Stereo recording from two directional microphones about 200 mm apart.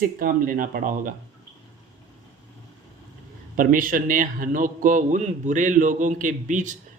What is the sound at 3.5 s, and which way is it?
A man's voice, 45° right (ahead or behind).